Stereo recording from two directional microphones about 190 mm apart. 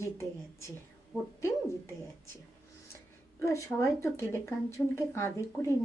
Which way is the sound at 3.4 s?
15° left (ahead or behind).